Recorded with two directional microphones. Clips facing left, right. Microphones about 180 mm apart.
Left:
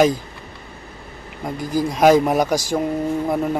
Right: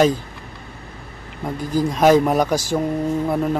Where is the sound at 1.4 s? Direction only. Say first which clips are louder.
Right 1 dB; 10° left (ahead or behind).